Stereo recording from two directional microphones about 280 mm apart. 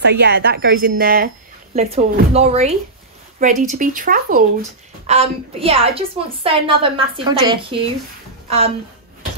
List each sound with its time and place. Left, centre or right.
0.0 s a woman's voice: right
1.8 s a woman's voice: right